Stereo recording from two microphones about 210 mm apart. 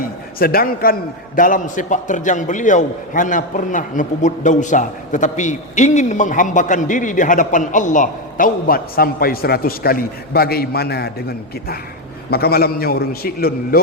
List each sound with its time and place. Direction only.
0.3 s a man's voice: 45° left (ahead or behind)